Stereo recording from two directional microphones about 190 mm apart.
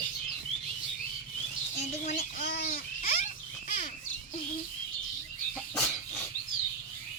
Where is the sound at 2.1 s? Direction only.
35° left (ahead or behind).